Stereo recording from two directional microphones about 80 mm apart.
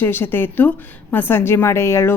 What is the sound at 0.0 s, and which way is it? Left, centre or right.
A woman's voice, left.